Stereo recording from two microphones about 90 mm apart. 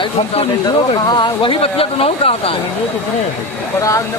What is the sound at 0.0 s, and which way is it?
Speech, 90° left.